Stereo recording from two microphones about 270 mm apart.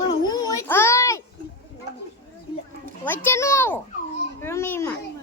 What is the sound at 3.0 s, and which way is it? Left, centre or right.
A child's voice, centre.